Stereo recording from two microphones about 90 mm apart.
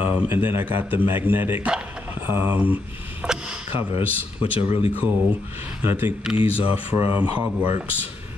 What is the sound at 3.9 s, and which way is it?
Speech, 90° left.